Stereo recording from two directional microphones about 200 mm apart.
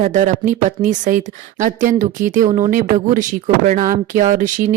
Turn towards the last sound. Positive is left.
turn(degrees=-40)  # may be behind; listen again after turning